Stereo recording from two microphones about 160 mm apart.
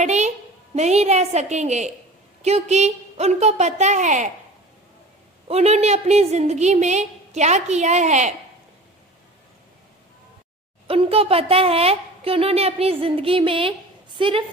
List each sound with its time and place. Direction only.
0.0 s a sound: 45° right (ahead or behind)
0.8 s a woman's voice: 45° right (ahead or behind)
5.5 s a woman's voice: 40° right (ahead or behind)
10.8 s a woman's voice: 35° right (ahead or behind)